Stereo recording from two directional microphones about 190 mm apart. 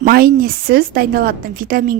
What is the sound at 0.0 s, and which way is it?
A woman's voice, 50° right (ahead or behind).